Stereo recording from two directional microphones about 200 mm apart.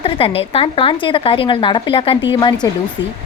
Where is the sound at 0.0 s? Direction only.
25° left (ahead or behind).